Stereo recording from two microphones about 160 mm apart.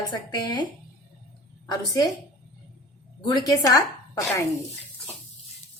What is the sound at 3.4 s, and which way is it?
Speech, 20° left (ahead or behind).